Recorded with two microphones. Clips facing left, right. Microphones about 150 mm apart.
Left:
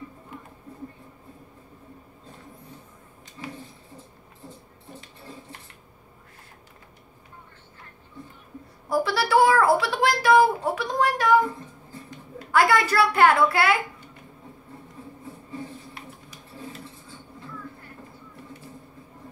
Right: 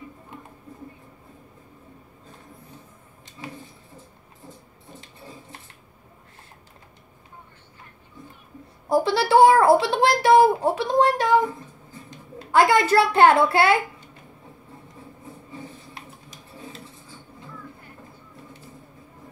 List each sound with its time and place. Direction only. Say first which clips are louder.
8.8 s a child's voice: right 4 dB; 25° right (ahead or behind)
12.4 s a child's voice: right 3 dB; 25° right (ahead or behind)
15.9 s a sound: even; 25° right (ahead or behind)